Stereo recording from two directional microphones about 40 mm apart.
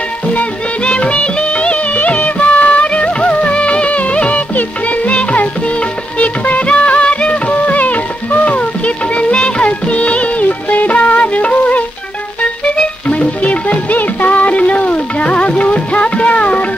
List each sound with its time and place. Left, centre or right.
0.8 s music of bollywood: left
6.1 s music: left
7.5 s music: left
9.7 s music of bollywood: left
13.1 s music: left